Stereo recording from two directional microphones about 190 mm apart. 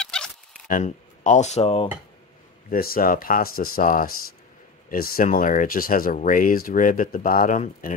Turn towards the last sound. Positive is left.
turn(degrees=40)  # may be behind; listen again after turning